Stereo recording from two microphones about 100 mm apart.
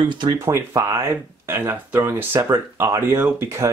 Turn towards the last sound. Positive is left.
turn(degrees=-30)  # may be behind; listen again after turning